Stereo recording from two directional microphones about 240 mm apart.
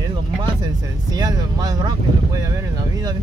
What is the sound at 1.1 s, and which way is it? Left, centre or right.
Speech, centre.